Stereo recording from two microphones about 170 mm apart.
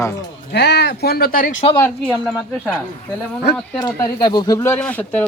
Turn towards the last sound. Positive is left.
turn(degrees=10)  # may be behind; listen again after turning